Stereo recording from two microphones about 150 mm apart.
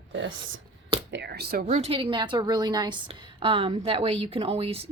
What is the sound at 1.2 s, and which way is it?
Speech, 90° right.